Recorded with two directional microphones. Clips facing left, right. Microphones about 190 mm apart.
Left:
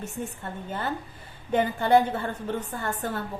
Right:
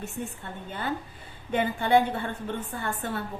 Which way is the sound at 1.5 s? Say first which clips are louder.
Left 2 dB; 40° left (ahead or behind).